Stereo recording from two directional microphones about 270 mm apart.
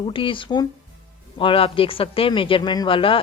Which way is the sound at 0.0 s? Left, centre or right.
Centre.